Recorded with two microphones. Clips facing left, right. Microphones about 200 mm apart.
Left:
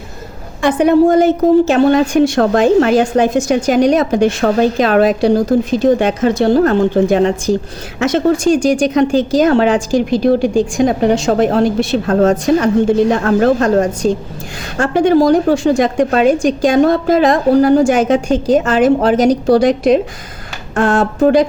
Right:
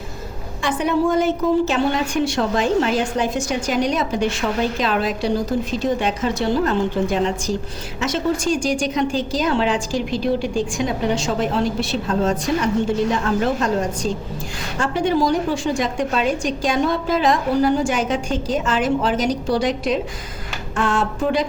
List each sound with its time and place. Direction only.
0.6 s a woman's voice: 65° left (ahead or behind)
1.1 s a woman's voice: 45° left (ahead or behind)
11.1 s a woman's voice: 55° left (ahead or behind)